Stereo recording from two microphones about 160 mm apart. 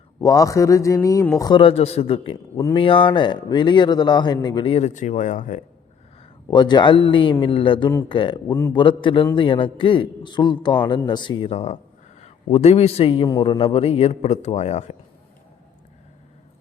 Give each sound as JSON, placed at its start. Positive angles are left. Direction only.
{"t": 0.2, "sound": "a man's voice", "side_deg": 20}
{"t": 4.9, "sound": "speech", "side_deg": 50}
{"t": 6.5, "sound": "a man's voice", "side_deg": 30}